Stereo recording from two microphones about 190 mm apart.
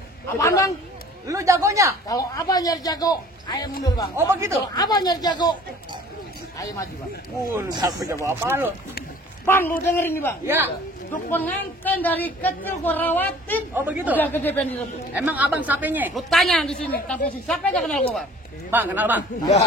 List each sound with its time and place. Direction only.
0.3 s speech: 15° left (ahead or behind)
1.2 s a woman's voice: 15° right (ahead or behind)
2.0 s a man's voice: 20° left (ahead or behind)
4.2 s a woman's voice: 10° right (ahead or behind)
4.7 s a man's voice: 20° left (ahead or behind)
7.5 s a woman's voice: 20° right (ahead or behind)
9.5 s speech: 10° left (ahead or behind)
10.4 s a woman's voice: 15° right (ahead or behind)
11.2 s speech: 10° left (ahead or behind)
13.7 s a woman's voice: 10° right (ahead or behind)
14.1 s speech: 10° left (ahead or behind)
15.1 s a woman's voice: 10° right (ahead or behind)
16.3 s speech: centre (ahead or behind)
18.7 s a woman's voice: 10° right (ahead or behind)